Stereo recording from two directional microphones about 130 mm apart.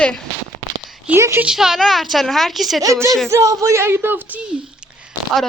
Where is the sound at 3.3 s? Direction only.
25° right (ahead or behind).